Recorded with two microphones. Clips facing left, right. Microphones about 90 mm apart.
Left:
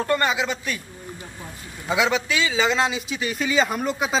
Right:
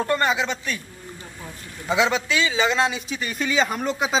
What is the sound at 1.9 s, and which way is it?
A man's voice, 5° left (ahead or behind).